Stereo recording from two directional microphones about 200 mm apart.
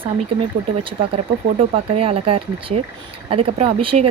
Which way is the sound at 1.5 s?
30° right (ahead or behind).